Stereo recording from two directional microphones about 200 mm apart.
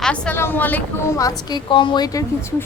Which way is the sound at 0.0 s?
5° left (ahead or behind).